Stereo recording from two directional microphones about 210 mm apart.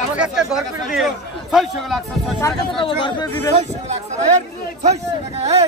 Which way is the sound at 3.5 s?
30° right (ahead or behind).